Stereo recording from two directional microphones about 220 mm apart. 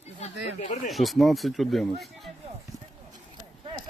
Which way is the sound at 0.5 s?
35° left (ahead or behind).